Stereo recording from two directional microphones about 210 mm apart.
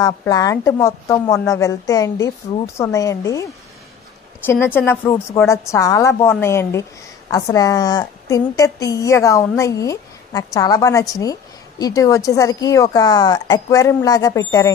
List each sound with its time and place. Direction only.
0.0 s a woman's voice: 15° left (ahead or behind)
4.5 s a woman's voice: 10° left (ahead or behind)